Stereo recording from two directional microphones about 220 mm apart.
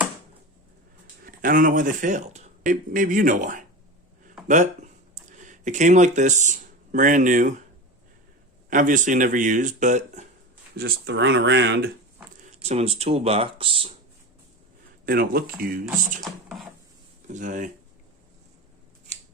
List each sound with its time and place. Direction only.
1.2 s speech: 40° right (ahead or behind)
8.7 s speech: 35° right (ahead or behind)
10.8 s speech: 45° right (ahead or behind)
12.6 s speech: 30° right (ahead or behind)
15.0 s speech: 40° right (ahead or behind)
15.9 s speech: 5° right (ahead or behind)
17.2 s speech: 35° right (ahead or behind)